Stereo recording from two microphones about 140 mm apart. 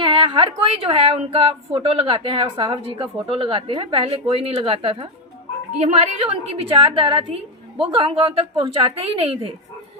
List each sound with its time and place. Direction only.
0.0 s a woman's voice: 40° right (ahead or behind)